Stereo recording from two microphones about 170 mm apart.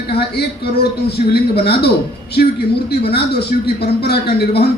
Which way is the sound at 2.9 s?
70° left (ahead or behind).